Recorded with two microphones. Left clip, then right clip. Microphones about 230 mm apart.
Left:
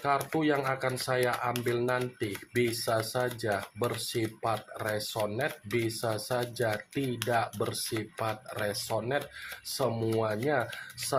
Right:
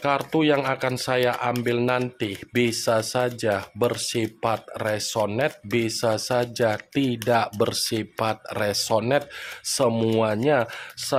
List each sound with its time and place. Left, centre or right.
0.3 s speech: right